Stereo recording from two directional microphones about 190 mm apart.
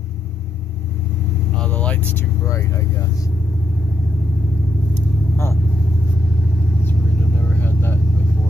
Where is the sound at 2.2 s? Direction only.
15° left (ahead or behind).